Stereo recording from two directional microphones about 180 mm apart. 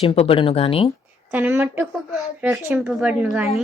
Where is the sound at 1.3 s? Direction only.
10° right (ahead or behind).